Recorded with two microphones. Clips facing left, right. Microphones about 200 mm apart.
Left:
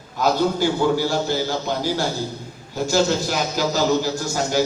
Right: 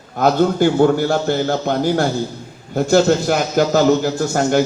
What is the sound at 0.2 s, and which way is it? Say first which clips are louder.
A man's voice: right 5 dB; 55° right (ahead or behind).